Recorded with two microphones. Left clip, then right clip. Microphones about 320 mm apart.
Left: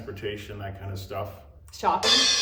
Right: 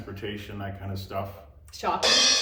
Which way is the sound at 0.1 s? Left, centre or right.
Centre.